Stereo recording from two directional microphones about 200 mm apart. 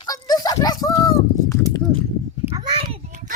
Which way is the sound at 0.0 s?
20° left (ahead or behind).